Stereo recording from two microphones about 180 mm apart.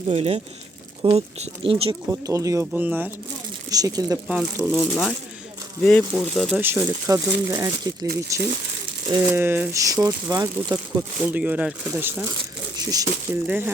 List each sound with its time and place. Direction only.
0.1 s speech: 35° right (ahead or behind)
2.0 s speech: 15° right (ahead or behind)
3.7 s speech: 20° right (ahead or behind)
4.3 s speech: 5° right (ahead or behind)
6.6 s speech: 15° right (ahead or behind)
12.2 s a sound: 20° right (ahead or behind)